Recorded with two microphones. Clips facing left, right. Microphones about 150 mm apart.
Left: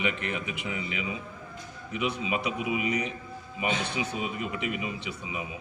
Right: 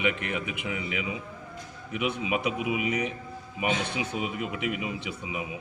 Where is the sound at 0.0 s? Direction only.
10° right (ahead or behind).